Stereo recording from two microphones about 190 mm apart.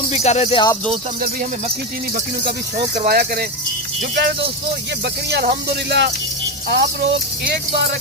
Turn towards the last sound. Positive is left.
turn(degrees=-60)  # may be behind; listen again after turning